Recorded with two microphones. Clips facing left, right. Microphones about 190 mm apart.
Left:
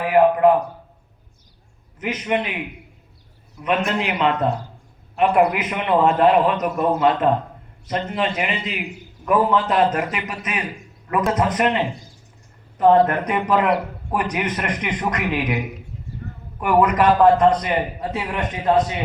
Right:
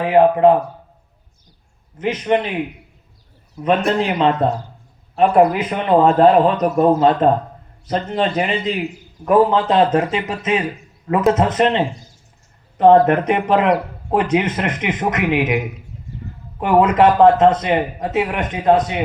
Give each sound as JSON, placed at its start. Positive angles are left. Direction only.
{"t": 0.0, "sound": "speech", "side_deg": -25}
{"t": 2.0, "sound": "a man's voice", "side_deg": -30}
{"t": 3.6, "sound": "a man's voice", "side_deg": -35}
{"t": 13.1, "sound": "speech", "side_deg": -25}
{"t": 16.6, "sound": "speech", "side_deg": -25}